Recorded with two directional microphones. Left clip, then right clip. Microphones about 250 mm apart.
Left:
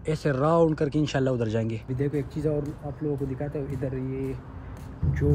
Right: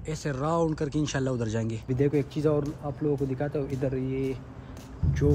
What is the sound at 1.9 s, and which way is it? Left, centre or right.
Speech, right.